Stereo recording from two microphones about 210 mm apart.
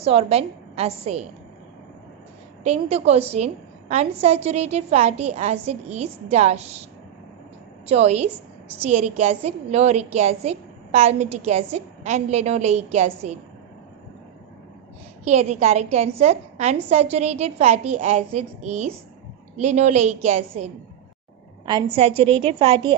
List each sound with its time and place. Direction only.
0.0 s a woman's voice: 30° right (ahead or behind)
2.6 s a woman's voice: 30° right (ahead or behind)
7.9 s a woman's voice: 30° right (ahead or behind)
15.2 s a woman's voice: 30° right (ahead or behind)
22.2 s a woman's voice: 25° right (ahead or behind)